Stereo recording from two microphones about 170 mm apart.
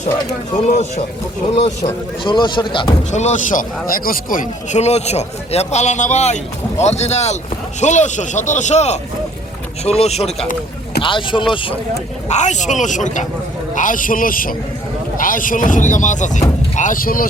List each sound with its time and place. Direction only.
0.7 s a man's voice: 45° left (ahead or behind)
1.8 s speech: 25° left (ahead or behind)
3.1 s a man's voice: 45° left (ahead or behind)
12.3 s a man's voice: 45° left (ahead or behind)